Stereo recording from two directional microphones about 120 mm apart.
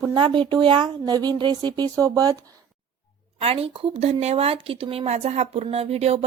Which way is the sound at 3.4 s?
50° right (ahead or behind).